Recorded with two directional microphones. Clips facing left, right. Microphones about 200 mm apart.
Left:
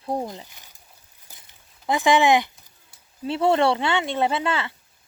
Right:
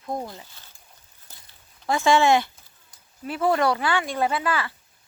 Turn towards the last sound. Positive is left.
turn(degrees=25)  # may be behind; listen again after turning